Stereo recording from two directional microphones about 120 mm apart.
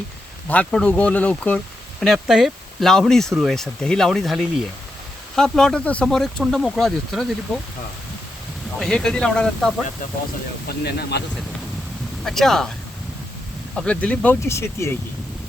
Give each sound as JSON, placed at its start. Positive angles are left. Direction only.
{"t": 0.4, "sound": "speech", "side_deg": 10}
{"t": 8.8, "sound": "speech", "side_deg": 5}
{"t": 12.2, "sound": "speech", "side_deg": 5}
{"t": 13.7, "sound": "speech", "side_deg": 10}
{"t": 14.4, "sound": "speech", "side_deg": 25}